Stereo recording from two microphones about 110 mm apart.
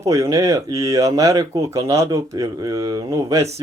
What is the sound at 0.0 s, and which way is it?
Speech, 30° right (ahead or behind).